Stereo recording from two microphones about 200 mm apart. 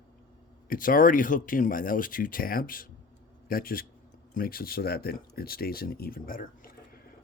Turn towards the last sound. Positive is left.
turn(degrees=45)  # may be behind; listen again after turning